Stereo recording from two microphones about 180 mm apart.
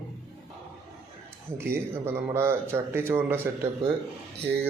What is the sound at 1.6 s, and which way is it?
A man's voice, 15° right (ahead or behind).